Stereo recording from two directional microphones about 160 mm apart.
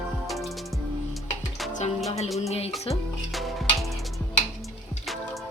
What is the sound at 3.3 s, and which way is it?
Music, centre (ahead or behind).